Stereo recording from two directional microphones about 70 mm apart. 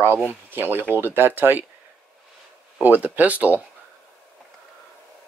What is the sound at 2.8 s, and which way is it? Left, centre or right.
Speech, right.